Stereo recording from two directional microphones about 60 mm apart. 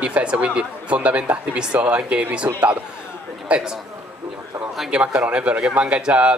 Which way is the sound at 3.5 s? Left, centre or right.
Right.